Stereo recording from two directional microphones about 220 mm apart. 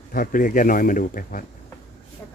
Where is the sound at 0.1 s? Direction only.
40° left (ahead or behind).